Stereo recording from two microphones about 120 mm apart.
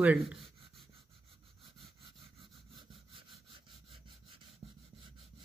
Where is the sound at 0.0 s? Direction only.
10° right (ahead or behind).